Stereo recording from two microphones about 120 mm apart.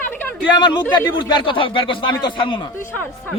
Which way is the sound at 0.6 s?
35° left (ahead or behind).